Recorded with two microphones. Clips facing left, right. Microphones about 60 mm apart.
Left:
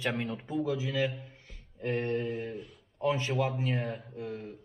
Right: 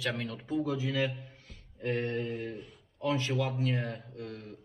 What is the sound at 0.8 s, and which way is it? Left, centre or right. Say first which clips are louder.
Speech: even; centre.